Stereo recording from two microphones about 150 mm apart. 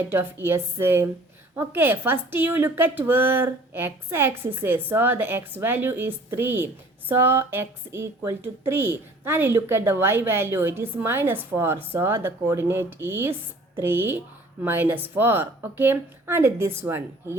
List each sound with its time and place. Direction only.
0.0 s speech: 15° right (ahead or behind)